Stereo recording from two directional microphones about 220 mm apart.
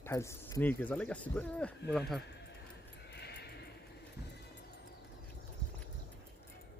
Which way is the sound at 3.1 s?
50° left (ahead or behind).